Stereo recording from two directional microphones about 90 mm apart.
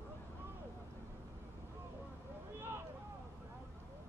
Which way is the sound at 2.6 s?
25° right (ahead or behind).